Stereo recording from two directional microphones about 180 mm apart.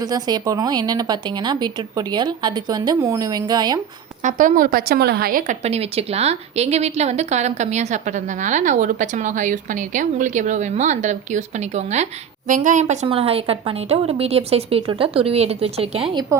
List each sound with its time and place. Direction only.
0.0 s a woman's voice: 20° right (ahead or behind)
4.2 s a woman's voice: 45° right (ahead or behind)
16.3 s a woman's voice: 15° right (ahead or behind)